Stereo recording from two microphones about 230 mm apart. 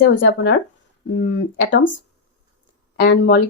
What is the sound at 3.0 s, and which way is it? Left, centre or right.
Speech, left.